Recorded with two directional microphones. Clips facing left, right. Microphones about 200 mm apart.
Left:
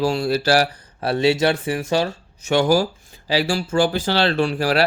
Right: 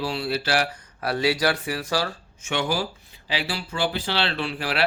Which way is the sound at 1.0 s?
25° left (ahead or behind).